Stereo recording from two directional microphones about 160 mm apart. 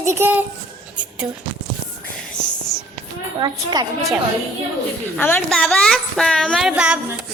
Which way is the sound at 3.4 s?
25° right (ahead or behind).